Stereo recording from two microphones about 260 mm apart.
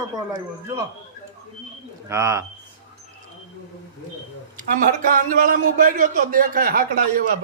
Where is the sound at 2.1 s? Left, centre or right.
Centre.